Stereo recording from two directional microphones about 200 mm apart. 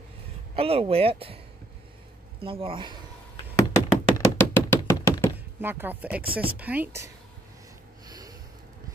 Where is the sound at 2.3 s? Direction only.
25° right (ahead or behind).